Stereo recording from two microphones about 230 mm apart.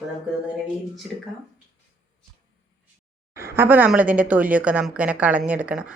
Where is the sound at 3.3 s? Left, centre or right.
Centre.